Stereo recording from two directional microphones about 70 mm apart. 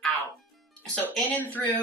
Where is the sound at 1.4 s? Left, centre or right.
Left.